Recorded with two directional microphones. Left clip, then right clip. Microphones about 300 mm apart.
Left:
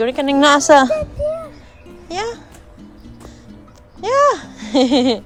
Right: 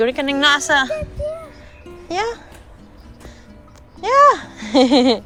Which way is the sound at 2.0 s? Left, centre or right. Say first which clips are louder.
Right 2 dB; centre.